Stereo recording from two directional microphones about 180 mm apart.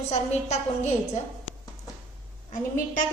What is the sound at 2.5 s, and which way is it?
Speech, 45° left (ahead or behind).